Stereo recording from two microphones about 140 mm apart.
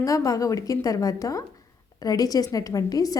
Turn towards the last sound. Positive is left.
turn(degrees=25)  # may be behind; listen again after turning